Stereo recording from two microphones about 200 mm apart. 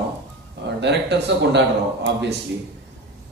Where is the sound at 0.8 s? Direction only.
60° right (ahead or behind).